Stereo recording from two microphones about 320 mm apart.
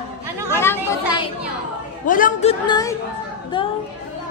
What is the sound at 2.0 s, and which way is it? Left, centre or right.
A woman's voice, left.